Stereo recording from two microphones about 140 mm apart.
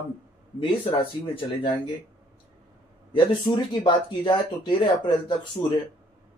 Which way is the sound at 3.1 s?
35° left (ahead or behind).